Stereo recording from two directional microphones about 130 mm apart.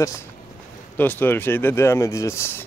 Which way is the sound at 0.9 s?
15° left (ahead or behind).